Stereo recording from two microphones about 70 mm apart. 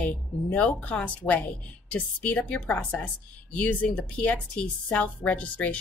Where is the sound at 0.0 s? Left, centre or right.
Centre.